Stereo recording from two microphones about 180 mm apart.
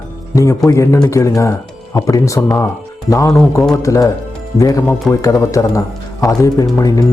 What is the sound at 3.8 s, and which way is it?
A man's voice, 15° left (ahead or behind).